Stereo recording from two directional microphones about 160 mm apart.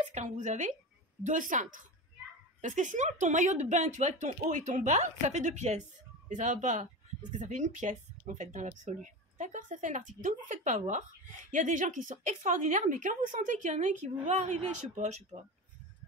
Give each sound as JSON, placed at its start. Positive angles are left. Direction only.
{"t": 0.1, "sound": "a woman's voice", "side_deg": -50}
{"t": 15.3, "sound": "speech", "side_deg": -35}